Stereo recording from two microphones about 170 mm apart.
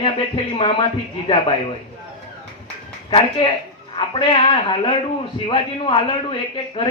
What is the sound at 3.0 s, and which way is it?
A man's voice, 30° left (ahead or behind).